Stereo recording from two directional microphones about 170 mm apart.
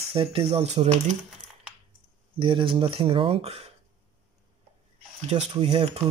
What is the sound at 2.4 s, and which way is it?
Speech, 30° right (ahead or behind).